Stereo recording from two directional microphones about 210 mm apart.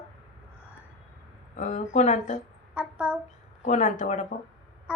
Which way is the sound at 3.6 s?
35° left (ahead or behind).